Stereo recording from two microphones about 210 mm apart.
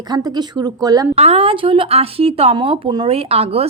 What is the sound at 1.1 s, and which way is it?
Speech, 30° right (ahead or behind).